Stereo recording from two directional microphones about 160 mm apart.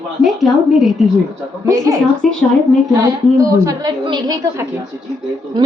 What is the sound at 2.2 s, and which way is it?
Speech, centre (ahead or behind).